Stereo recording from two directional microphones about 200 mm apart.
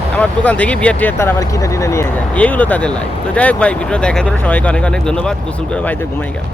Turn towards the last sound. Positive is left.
turn(degrees=5)  # may be behind; listen again after turning